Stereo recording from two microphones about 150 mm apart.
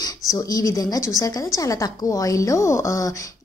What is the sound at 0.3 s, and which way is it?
A woman's voice, 25° left (ahead or behind).